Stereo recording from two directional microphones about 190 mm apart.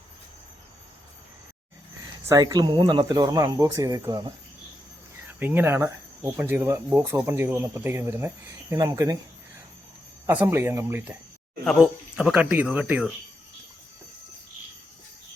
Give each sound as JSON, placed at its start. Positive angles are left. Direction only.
{"t": 2.2, "sound": "speech", "side_deg": -20}
{"t": 5.4, "sound": "speech", "side_deg": -10}
{"t": 10.2, "sound": "speech", "side_deg": -15}